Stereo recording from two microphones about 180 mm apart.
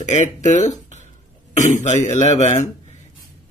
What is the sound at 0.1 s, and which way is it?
Speech, 40° left (ahead or behind).